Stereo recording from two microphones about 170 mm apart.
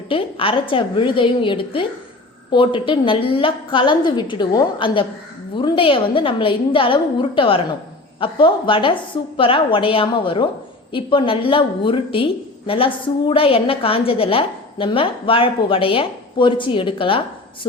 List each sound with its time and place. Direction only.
0.1 s a woman's voice: 30° left (ahead or behind)